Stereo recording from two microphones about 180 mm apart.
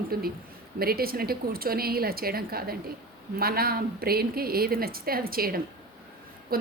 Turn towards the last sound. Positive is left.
turn(degrees=-55)  # may be behind; listen again after turning